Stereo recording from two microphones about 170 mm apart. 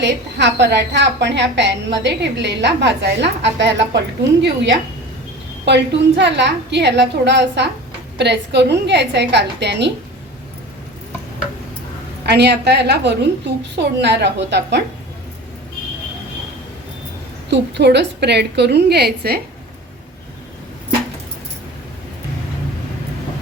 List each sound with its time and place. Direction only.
0.0 s a woman's voice: 90° right
12.2 s a woman's voice: 80° right
17.5 s a woman's voice: 85° right; by 19.4 s 70° right (ahead or behind)